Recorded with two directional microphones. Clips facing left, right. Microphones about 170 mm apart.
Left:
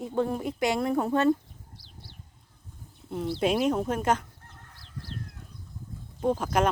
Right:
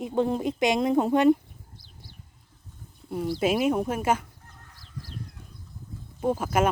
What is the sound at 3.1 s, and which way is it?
Speech, 5° right (ahead or behind).